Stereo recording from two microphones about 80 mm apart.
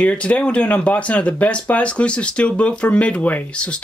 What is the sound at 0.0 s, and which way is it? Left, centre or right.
Speech, centre.